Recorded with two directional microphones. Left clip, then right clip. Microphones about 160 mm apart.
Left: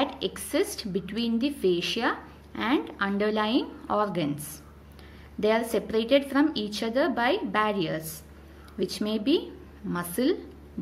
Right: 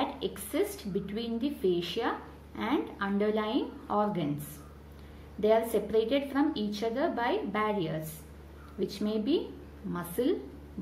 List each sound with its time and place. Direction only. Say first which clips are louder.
0.0 s a woman's voice: left 4 dB; 30° left (ahead or behind)
5.4 s a woman's voice: left 1 dB; 30° left (ahead or behind)